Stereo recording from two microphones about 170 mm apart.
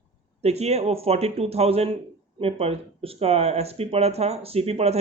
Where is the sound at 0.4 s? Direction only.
40° right (ahead or behind).